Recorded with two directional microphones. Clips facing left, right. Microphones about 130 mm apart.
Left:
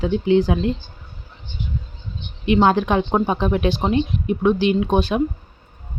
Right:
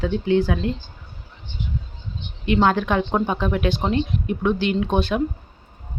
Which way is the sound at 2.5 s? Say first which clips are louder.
Left 3 dB; 20° left (ahead or behind).